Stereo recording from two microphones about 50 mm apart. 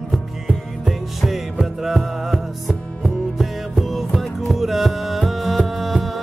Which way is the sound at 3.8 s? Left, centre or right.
Centre.